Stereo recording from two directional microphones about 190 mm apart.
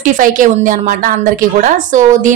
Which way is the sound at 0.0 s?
45° right (ahead or behind).